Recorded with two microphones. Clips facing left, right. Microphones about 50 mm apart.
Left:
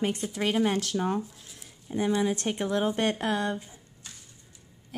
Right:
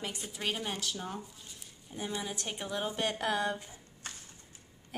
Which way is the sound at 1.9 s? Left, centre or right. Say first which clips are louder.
Left 12 dB; left.